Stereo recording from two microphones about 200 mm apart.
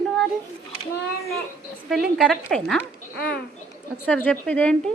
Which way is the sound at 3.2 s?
50° left (ahead or behind).